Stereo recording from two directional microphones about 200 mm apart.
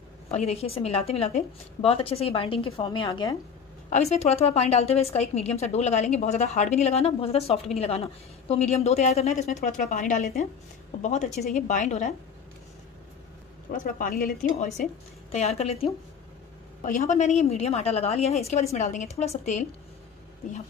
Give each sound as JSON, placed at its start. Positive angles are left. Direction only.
{"t": 0.3, "sound": "a woman's voice", "side_deg": 35}
{"t": 3.9, "sound": "a woman's voice", "side_deg": 35}
{"t": 13.7, "sound": "a woman's voice", "side_deg": 40}
{"t": 15.3, "sound": "a woman's voice", "side_deg": 35}